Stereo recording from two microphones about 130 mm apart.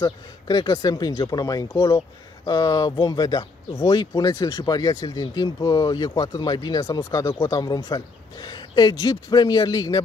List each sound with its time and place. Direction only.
0.0 s speech: 30° left (ahead or behind)